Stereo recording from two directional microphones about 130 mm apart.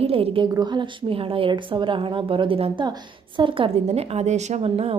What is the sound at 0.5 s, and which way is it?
Speech, 35° right (ahead or behind).